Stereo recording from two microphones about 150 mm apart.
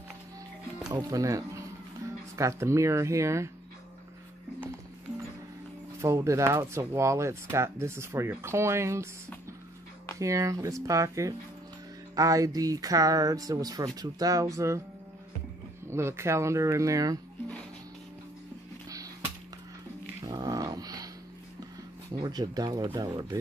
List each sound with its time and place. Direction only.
0.9 s speech: 25° right (ahead or behind)
5.9 s speech: 20° right (ahead or behind)
10.1 s speech: 20° right (ahead or behind)
15.9 s speech: 15° right (ahead or behind)
20.2 s dog: 25° right (ahead or behind)
22.2 s speech: 30° right (ahead or behind)